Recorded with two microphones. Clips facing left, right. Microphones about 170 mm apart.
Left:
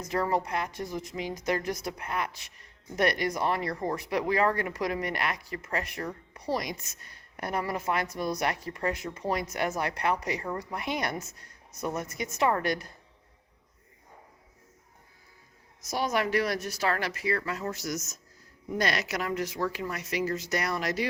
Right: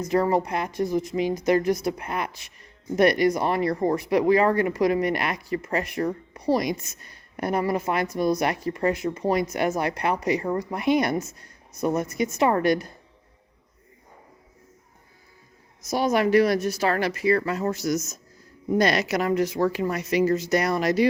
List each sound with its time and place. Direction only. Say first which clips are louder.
0.1 s speech: right 6 dB; 20° right (ahead or behind)
15.9 s speech: right 7 dB; 20° right (ahead or behind)
18.8 s speech: right 7 dB; 20° right (ahead or behind)